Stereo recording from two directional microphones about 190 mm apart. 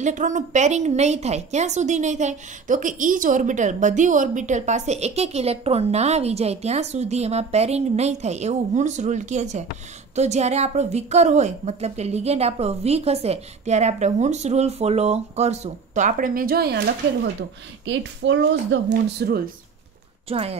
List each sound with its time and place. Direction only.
0.0 s a woman's voice: 40° right (ahead or behind)
17.8 s speech: 75° right (ahead or behind); by 19.5 s 55° right (ahead or behind)
20.2 s speech: 30° right (ahead or behind)